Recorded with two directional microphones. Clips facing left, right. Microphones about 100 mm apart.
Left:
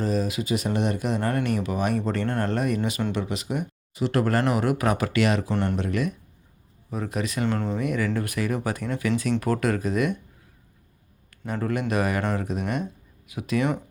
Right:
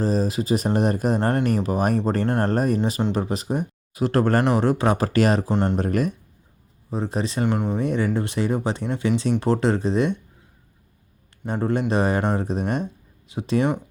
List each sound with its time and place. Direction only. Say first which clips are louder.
0.0 s speech: right 3 dB; 35° right (ahead or behind)
6.9 s speech: right 3 dB; 30° right (ahead or behind)
7.4 s speech: right 3 dB; 15° right (ahead or behind)
7.8 s speech: right 3 dB; 30° right (ahead or behind)
11.3 s speech: right 4 dB; 25° right (ahead or behind)